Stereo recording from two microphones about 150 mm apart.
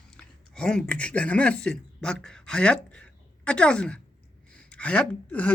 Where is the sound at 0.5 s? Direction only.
5° left (ahead or behind).